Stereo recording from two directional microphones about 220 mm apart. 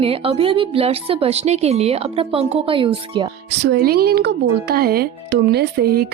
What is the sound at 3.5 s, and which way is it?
Speech, 55° right (ahead or behind).